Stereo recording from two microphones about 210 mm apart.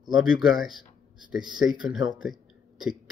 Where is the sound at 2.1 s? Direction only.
Centre (ahead or behind).